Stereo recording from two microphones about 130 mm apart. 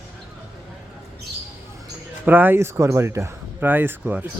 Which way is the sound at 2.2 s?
15° right (ahead or behind).